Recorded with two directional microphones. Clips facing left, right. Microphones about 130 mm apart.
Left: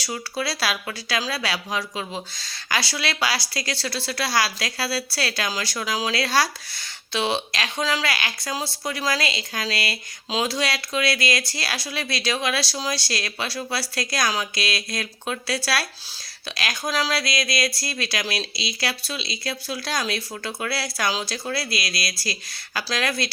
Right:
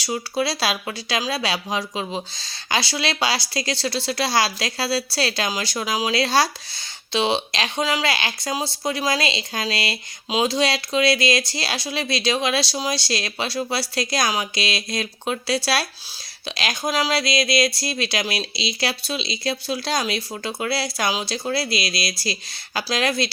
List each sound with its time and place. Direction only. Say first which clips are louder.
0.0 s speech: right 5 dB; 20° right (ahead or behind)